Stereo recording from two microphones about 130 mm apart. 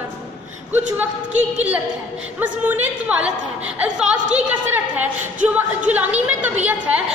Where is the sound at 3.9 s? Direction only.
10° right (ahead or behind).